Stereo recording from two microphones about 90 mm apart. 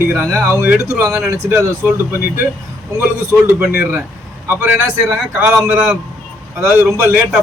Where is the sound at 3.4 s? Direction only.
20° right (ahead or behind).